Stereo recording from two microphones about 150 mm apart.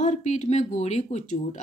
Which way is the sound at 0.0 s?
50° left (ahead or behind).